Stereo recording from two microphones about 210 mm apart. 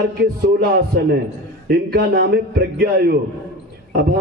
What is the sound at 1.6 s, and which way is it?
A man's voice, 45° right (ahead or behind).